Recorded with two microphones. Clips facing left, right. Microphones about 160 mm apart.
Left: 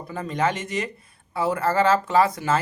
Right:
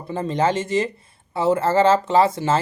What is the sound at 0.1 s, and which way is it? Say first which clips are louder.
Speech: right 4 dB; 25° right (ahead or behind).